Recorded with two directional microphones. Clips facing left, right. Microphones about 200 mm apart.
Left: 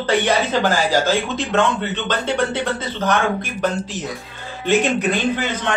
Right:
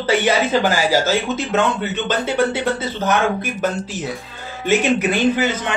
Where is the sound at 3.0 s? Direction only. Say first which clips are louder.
Right 1 dB; 5° right (ahead or behind).